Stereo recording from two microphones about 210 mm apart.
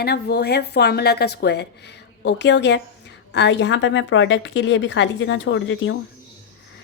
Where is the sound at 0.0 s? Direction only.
50° left (ahead or behind).